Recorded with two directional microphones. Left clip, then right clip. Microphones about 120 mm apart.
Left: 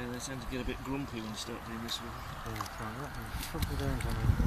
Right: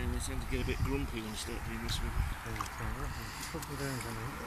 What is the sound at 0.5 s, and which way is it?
Speech, 40° left (ahead or behind).